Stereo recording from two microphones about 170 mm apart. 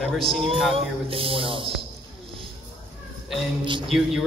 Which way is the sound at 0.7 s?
30° right (ahead or behind).